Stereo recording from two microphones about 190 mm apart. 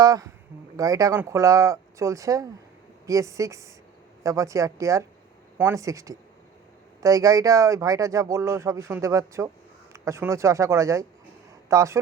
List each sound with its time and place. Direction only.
0.0 s speech: 20° right (ahead or behind)